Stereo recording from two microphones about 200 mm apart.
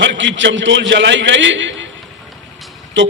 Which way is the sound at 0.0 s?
65° right (ahead or behind).